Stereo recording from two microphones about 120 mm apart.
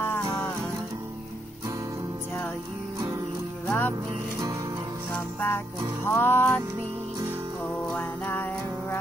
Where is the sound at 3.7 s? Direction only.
15° left (ahead or behind).